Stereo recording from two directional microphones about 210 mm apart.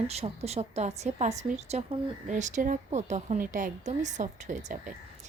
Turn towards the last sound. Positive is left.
turn(degrees=-35)  # may be behind; listen again after turning